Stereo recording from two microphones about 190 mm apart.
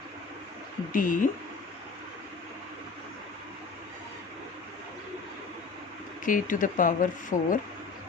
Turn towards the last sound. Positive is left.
turn(degrees=45)  # may be behind; listen again after turning